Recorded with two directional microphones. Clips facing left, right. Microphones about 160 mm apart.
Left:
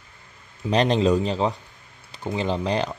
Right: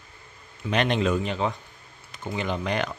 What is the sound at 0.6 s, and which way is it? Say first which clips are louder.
A man's voice: left 4 dB; 35° left (ahead or behind).